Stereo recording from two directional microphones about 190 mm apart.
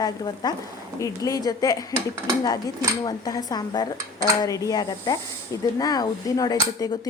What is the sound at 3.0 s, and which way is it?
Speech, 20° left (ahead or behind).